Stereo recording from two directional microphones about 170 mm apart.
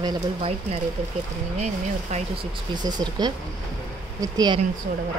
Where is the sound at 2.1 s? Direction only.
45° right (ahead or behind).